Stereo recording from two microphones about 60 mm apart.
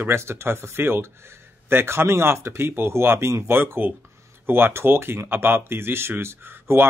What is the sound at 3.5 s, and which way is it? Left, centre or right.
Speech, right.